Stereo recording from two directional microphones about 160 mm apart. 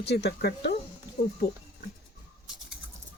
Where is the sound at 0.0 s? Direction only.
90° left.